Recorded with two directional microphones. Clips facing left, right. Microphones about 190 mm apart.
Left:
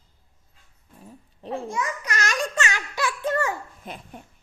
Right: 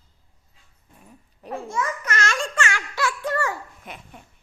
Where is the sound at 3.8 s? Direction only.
35° left (ahead or behind).